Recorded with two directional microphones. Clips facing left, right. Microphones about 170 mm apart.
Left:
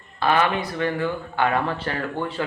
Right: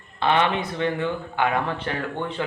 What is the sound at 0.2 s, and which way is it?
Speech, 20° right (ahead or behind).